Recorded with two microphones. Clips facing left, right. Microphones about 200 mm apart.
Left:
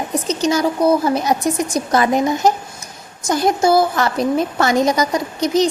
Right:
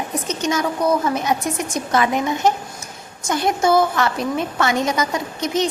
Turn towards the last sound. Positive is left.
turn(degrees=35)  # may be behind; listen again after turning